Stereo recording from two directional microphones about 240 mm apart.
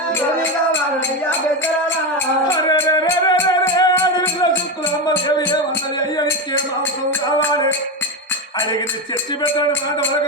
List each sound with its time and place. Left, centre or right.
2.5 s music: centre
9.4 s music: centre